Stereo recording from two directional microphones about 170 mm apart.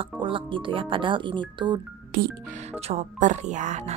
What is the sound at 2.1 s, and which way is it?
Music, 55° right (ahead or behind).